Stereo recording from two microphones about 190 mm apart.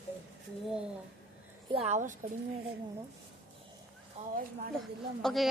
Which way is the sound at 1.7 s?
35° right (ahead or behind).